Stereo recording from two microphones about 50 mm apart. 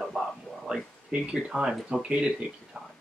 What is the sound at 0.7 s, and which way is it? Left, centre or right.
Speech, centre.